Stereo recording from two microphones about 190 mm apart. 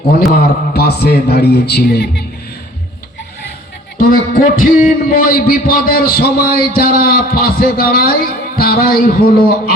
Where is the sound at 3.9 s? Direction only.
50° left (ahead or behind).